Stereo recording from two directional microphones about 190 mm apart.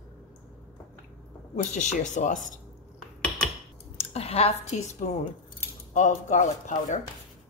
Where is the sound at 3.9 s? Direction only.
30° left (ahead or behind).